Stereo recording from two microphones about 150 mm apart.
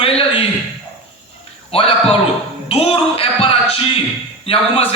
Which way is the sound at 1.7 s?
40° left (ahead or behind).